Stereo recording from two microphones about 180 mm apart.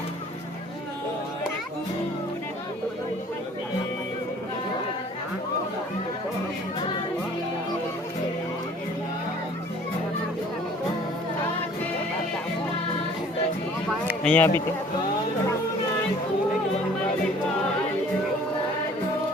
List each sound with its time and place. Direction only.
14.3 s speech: 10° left (ahead or behind)